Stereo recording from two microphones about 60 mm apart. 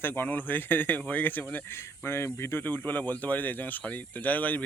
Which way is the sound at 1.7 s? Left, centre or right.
Left.